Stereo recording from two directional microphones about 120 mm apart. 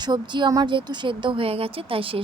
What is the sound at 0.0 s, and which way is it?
Speech, 40° right (ahead or behind).